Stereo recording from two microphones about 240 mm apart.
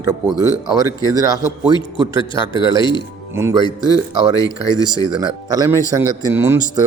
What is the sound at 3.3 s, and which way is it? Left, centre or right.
Speech, centre.